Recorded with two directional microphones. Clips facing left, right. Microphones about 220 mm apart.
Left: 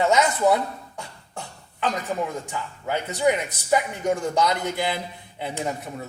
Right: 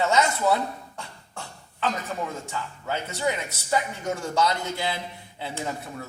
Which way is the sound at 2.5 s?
15° left (ahead or behind).